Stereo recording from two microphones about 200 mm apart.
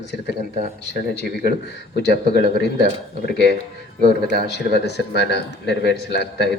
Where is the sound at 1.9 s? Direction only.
55° left (ahead or behind).